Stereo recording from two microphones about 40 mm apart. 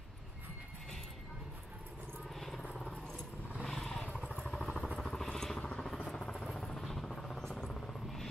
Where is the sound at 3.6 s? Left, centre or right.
Centre.